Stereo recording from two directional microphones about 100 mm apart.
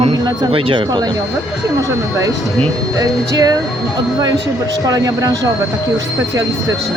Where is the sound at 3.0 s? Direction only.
40° right (ahead or behind).